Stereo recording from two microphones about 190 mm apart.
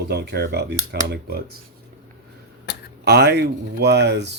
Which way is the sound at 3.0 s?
60° right (ahead or behind).